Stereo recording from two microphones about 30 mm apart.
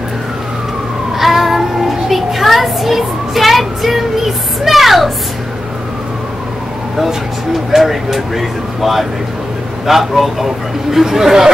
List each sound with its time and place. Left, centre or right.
1.1 s child singing: centre
7.7 s speech: centre